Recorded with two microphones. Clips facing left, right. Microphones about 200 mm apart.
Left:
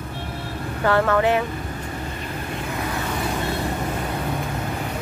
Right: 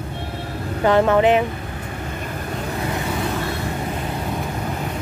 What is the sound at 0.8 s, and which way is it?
Speech, 20° right (ahead or behind).